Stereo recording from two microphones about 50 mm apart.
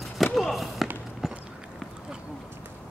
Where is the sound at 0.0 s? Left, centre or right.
Centre.